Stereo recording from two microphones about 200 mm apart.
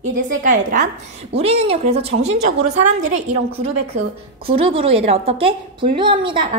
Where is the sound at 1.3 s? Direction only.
30° right (ahead or behind).